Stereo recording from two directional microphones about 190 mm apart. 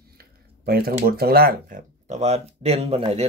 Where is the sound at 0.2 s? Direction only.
55° right (ahead or behind).